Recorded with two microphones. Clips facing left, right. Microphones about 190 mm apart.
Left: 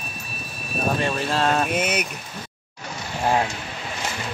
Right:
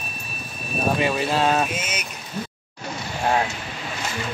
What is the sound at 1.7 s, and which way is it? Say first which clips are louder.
Speech: left 7 dB; 60° left (ahead or behind).